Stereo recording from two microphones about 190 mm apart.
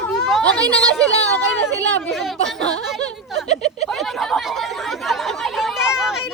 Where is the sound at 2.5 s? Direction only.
65° right (ahead or behind).